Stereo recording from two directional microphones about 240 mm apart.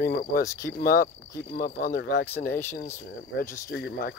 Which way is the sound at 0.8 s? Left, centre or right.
Left.